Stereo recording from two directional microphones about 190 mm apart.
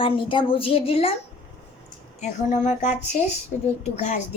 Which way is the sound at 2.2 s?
40° left (ahead or behind).